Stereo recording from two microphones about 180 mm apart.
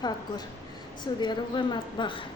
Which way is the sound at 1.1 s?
25° left (ahead or behind).